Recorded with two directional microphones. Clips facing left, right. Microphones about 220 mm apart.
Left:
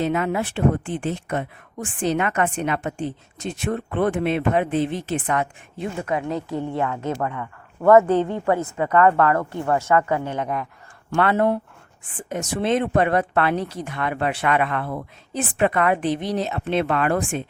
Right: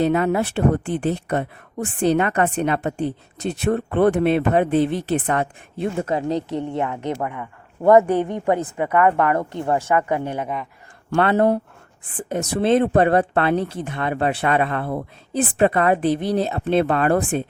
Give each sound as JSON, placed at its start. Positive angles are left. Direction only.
{"t": 0.0, "sound": "speech", "side_deg": -40}
{"t": 6.6, "sound": "speech", "side_deg": -20}
{"t": 11.1, "sound": "speech", "side_deg": -30}